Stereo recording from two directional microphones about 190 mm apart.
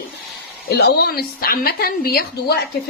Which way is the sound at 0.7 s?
60° left (ahead or behind).